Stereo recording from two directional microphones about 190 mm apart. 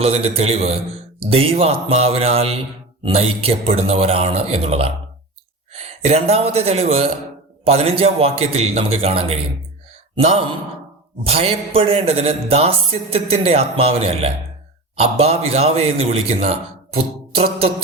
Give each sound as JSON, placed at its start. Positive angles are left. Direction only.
{"t": 0.0, "sound": "a man's voice", "side_deg": -30}
{"t": 6.1, "sound": "a man's voice", "side_deg": -30}